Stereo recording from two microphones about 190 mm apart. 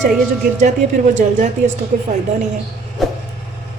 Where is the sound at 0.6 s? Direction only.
40° right (ahead or behind).